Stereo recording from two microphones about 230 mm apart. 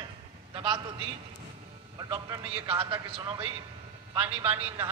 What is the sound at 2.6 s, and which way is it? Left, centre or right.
Speech, right.